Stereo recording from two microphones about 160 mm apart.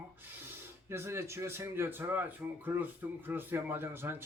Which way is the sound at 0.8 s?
15° right (ahead or behind).